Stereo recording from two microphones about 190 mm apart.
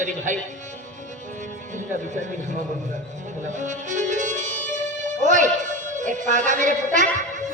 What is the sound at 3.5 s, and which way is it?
Music, 40° right (ahead or behind).